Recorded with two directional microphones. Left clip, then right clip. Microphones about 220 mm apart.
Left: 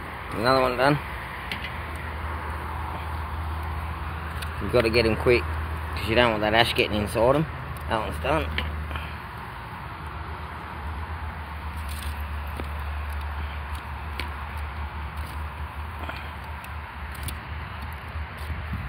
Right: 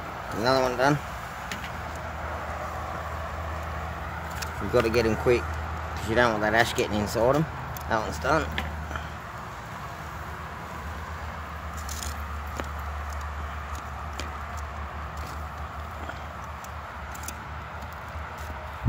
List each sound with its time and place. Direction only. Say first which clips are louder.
0.4 s speech: left 2 dB; 15° right (ahead or behind)
4.7 s speech: left 2 dB; 15° right (ahead or behind)